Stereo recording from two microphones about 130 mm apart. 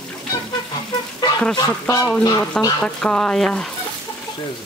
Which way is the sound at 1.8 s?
25° left (ahead or behind).